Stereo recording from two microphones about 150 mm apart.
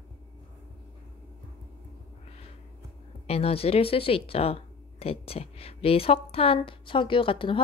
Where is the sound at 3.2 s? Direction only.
40° left (ahead or behind).